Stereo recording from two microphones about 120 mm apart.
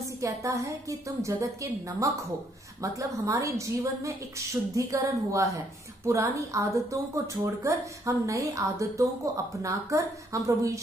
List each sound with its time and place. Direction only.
0.2 s a woman's voice: 25° right (ahead or behind)